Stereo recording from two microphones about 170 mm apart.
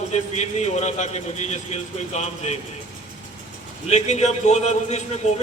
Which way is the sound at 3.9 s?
40° left (ahead or behind).